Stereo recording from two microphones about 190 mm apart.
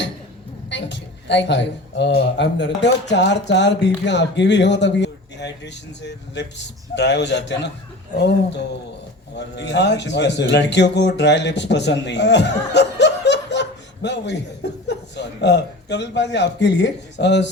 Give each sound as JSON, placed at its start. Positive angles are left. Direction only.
{"t": 0.7, "sound": "a woman's voice", "side_deg": 70}